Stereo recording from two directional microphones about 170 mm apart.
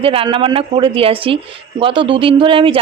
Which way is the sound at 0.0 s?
35° right (ahead or behind).